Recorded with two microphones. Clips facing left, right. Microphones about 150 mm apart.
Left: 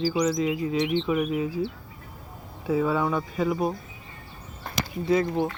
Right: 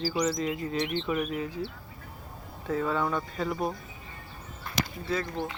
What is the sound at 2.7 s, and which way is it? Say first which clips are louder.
Speech: left 4 dB; 5° left (ahead or behind).